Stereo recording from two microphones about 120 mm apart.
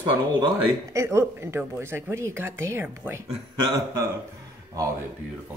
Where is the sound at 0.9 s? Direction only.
25° right (ahead or behind).